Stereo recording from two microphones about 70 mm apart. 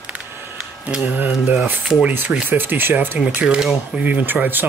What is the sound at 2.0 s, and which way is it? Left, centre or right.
Speech, right.